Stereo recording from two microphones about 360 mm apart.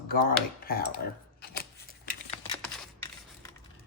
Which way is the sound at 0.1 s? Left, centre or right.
Left.